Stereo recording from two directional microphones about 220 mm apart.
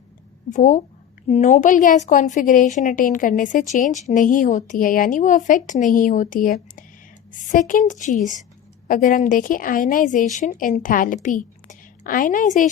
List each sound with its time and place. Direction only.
0.5 s a woman's voice: 35° left (ahead or behind)